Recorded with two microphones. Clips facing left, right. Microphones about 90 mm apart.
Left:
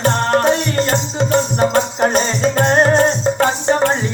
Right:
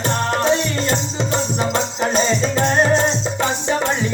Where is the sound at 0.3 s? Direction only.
50° left (ahead or behind).